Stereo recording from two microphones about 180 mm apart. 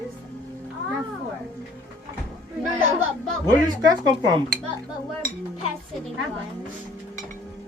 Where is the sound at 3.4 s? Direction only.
25° right (ahead or behind).